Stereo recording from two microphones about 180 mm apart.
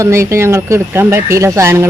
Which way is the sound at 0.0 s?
15° right (ahead or behind).